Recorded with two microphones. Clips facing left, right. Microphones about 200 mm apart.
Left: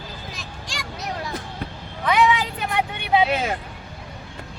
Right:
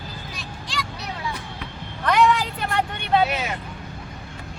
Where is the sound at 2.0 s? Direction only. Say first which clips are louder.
Even; centre (ahead or behind).